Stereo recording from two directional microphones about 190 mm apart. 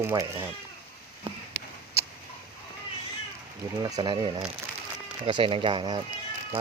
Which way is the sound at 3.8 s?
25° right (ahead or behind).